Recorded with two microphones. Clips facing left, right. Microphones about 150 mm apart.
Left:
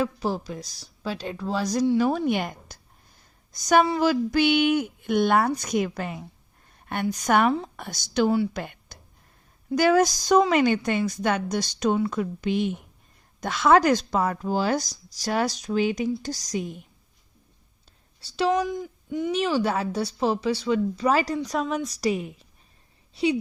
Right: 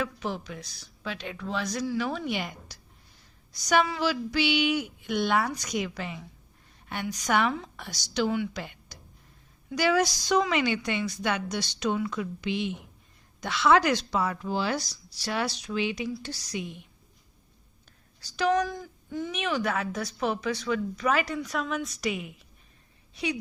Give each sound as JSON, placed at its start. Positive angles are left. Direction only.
{"t": 0.0, "sound": "a woman's voice", "side_deg": 35}
{"t": 2.1, "sound": "a woman's voice", "side_deg": 50}
{"t": 8.5, "sound": "a sound", "side_deg": 50}
{"t": 9.7, "sound": "a woman's voice", "side_deg": 45}
{"t": 18.2, "sound": "speech", "side_deg": 30}
{"t": 18.7, "sound": "speech", "side_deg": 15}
{"t": 19.3, "sound": "a woman's voice", "side_deg": 30}